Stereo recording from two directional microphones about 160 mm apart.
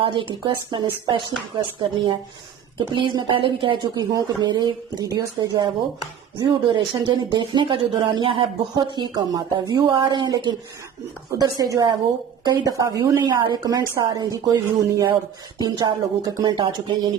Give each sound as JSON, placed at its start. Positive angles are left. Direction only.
{"t": 0.0, "sound": "speech", "side_deg": -30}